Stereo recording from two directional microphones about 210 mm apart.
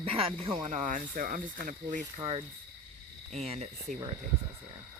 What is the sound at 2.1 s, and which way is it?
Speech, 25° right (ahead or behind).